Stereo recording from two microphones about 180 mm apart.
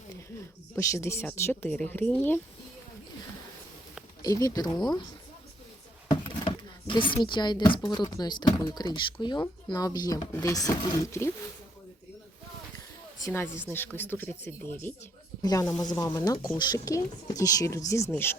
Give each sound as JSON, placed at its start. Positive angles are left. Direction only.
{"t": 0.8, "sound": "speech", "side_deg": 15}
{"t": 4.2, "sound": "speech", "side_deg": 20}
{"t": 6.4, "sound": "speech", "side_deg": 25}
{"t": 13.1, "sound": "speech", "side_deg": 15}